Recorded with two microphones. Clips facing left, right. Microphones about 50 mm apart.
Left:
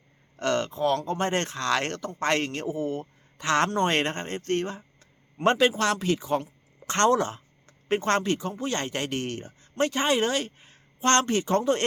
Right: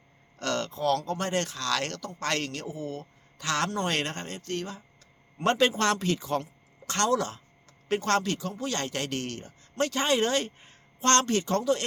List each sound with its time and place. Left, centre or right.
0.3 s speech: left
5.5 s speech: centre
6.9 s speech: left; by 10.8 s centre
11.0 s speech: centre
11.6 s speech: left